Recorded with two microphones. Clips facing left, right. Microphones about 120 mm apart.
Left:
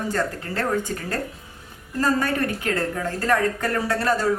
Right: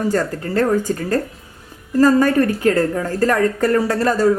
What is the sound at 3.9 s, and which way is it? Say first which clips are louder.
Speech: right 6 dB; 40° right (ahead or behind).